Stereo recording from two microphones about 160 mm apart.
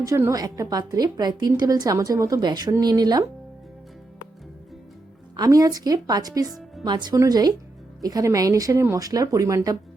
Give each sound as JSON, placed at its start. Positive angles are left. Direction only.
{"t": 0.0, "sound": "a woman's voice", "side_deg": -20}
{"t": 5.4, "sound": "a woman's voice", "side_deg": -20}
{"t": 6.5, "sound": "music", "side_deg": 0}
{"t": 6.8, "sound": "a woman's voice", "side_deg": -25}